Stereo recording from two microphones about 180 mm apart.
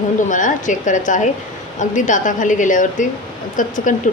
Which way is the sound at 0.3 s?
45° left (ahead or behind).